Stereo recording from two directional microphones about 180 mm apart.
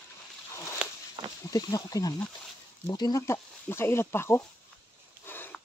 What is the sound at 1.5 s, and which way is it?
Speech, 20° left (ahead or behind).